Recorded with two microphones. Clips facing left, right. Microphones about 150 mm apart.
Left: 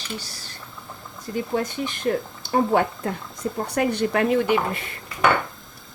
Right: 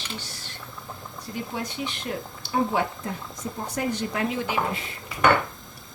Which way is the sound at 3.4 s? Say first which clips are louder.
Left 6 dB; 65° left (ahead or behind).